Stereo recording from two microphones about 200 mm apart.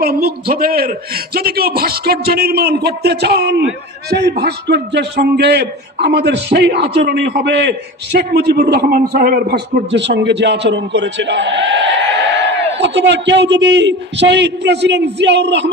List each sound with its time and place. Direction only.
0.0 s a man's voice: 50° right (ahead or behind)